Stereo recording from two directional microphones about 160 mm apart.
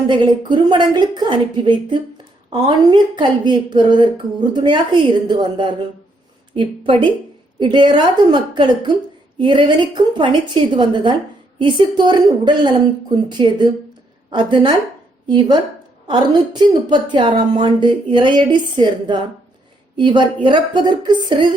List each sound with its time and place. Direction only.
0.1 s a woman's voice: 30° right (ahead or behind)